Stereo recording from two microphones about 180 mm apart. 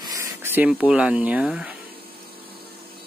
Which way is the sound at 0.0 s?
20° right (ahead or behind).